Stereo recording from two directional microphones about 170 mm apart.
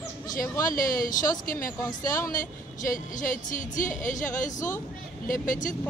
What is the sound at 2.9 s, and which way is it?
A woman's voice, 50° left (ahead or behind).